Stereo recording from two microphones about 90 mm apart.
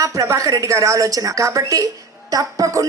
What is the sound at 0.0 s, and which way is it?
A woman's voice, 35° right (ahead or behind).